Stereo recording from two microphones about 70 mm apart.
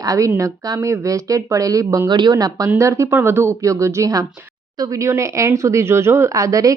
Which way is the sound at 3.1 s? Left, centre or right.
Right.